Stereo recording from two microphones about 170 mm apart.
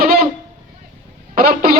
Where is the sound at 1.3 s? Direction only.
60° right (ahead or behind).